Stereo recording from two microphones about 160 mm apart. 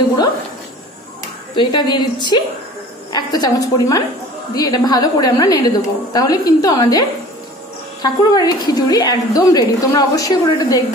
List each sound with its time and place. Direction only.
1.5 s a woman's voice: 30° left (ahead or behind)